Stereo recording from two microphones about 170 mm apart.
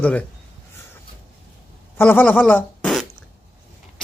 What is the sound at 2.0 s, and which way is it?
Speech, 10° left (ahead or behind).